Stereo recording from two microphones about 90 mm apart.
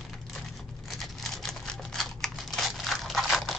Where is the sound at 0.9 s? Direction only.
5° left (ahead or behind).